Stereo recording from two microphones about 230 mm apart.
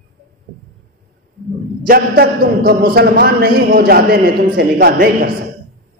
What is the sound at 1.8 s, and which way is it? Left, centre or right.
A man's voice, right.